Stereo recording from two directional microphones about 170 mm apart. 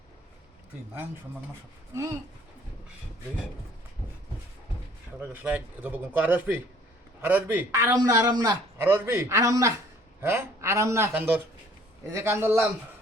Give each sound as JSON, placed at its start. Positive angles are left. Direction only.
{"t": 5.3, "sound": "a man's voice", "side_deg": -10}